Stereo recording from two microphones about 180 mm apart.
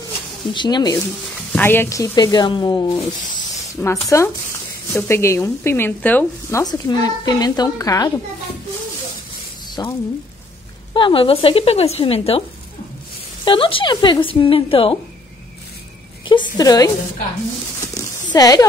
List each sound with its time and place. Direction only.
0.5 s speech: 25° left (ahead or behind)
1.5 s speech: 10° left (ahead or behind)
6.6 s speech: 20° left (ahead or behind)
9.8 s a woman's voice: 20° left (ahead or behind)
16.5 s speech: 20° left (ahead or behind)
17.7 s horse: 20° left (ahead or behind)